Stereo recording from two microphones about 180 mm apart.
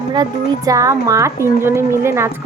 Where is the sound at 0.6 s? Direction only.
20° right (ahead or behind).